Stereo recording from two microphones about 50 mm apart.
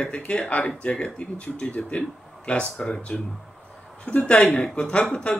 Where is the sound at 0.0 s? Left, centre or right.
Left.